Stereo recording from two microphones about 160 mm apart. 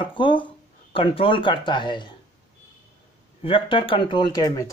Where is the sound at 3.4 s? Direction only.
35° left (ahead or behind).